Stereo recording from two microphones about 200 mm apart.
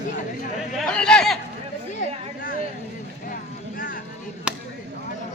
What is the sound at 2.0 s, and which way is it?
Chatter, 45° left (ahead or behind).